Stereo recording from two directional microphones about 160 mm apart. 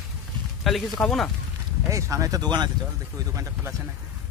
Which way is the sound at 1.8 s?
20° right (ahead or behind).